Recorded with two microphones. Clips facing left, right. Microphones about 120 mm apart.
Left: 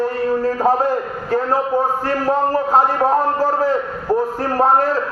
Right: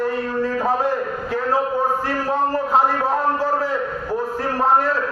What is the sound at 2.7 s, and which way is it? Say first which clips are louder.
Speech: left 4 dB; 45° left (ahead or behind).